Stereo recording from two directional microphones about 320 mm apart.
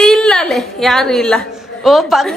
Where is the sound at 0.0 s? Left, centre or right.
Centre.